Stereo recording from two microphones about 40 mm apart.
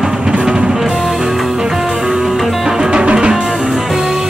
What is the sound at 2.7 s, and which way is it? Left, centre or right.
Music, centre.